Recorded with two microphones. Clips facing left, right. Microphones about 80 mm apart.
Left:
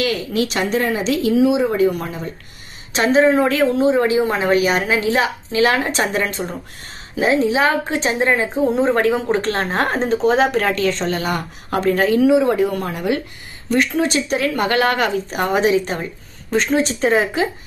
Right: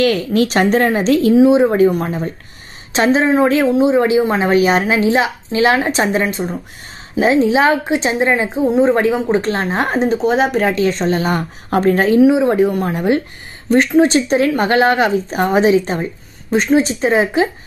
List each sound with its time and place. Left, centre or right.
0.0 s speech: right
1.3 s speech: right
1.6 s speech: right
2.9 s speech: right
3.6 s speech: centre
7.9 s a woman's voice: centre
8.5 s a woman's voice: centre
9.4 s speech: centre
10.0 s speech: centre
10.7 s speech: right
12.2 s speech: right
16.4 s speech: centre